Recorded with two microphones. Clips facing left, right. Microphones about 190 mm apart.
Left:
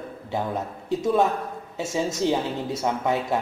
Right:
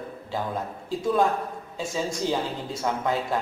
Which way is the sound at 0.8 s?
20° left (ahead or behind).